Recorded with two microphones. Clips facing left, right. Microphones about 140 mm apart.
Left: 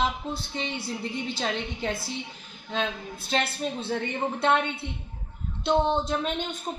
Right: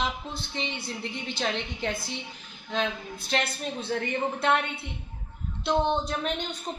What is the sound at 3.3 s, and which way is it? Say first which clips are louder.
Speech: left 2 dB; 30° left (ahead or behind).